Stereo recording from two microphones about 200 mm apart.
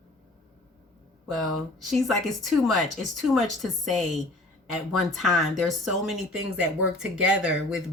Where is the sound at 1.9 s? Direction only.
Centre (ahead or behind).